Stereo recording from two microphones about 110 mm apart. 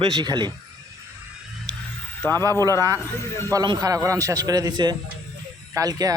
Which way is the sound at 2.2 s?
15° left (ahead or behind).